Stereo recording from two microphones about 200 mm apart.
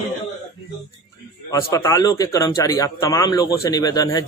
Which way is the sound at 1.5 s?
15° left (ahead or behind).